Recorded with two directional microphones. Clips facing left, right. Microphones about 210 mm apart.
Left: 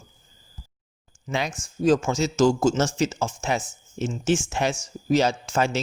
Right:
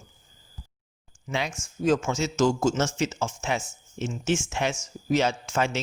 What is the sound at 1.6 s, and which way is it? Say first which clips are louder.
A man's voice: left 4 dB; 35° left (ahead or behind).